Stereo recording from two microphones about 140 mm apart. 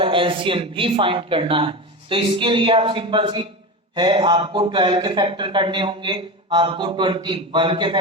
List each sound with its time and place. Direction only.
0.0 s speech: 40° right (ahead or behind)